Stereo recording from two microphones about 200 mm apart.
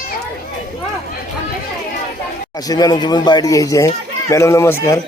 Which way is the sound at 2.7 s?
20° left (ahead or behind).